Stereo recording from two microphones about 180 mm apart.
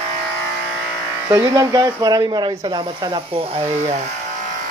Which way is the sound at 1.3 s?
20° right (ahead or behind).